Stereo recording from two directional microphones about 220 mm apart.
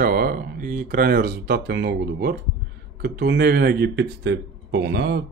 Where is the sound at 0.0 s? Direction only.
40° right (ahead or behind).